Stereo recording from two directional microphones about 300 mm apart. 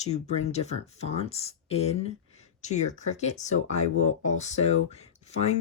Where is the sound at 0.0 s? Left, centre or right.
Left.